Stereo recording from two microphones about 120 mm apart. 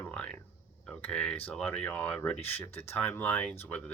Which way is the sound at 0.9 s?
10° left (ahead or behind).